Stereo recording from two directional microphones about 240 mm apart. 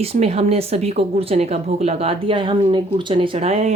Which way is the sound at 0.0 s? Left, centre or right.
Right.